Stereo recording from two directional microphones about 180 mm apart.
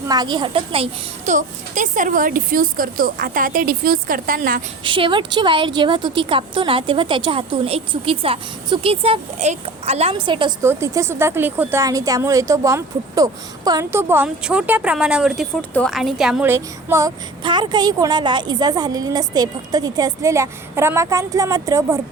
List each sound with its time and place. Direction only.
0.1 s a child's voice: 25° right (ahead or behind); by 4.6 s 50° right (ahead or behind)
4.8 s speech: 30° right (ahead or behind)
10.6 s speech: 15° right (ahead or behind)